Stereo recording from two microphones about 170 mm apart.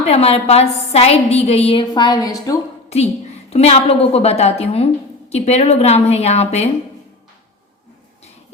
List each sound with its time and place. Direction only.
0.1 s a woman's voice: 35° left (ahead or behind); by 2.6 s 20° left (ahead or behind)
2.9 s a woman's voice: 40° left (ahead or behind)